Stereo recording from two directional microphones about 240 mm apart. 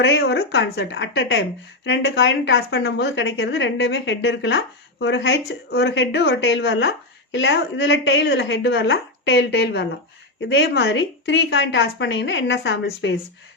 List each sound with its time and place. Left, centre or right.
0.0 s a woman's voice: left